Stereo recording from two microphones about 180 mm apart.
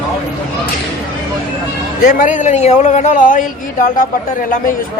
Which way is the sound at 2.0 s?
45° left (ahead or behind).